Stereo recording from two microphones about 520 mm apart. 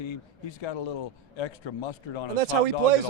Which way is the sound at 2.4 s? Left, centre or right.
Right.